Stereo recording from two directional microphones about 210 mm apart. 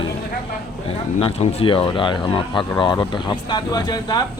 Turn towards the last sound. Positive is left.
turn(degrees=20)  # may be behind; listen again after turning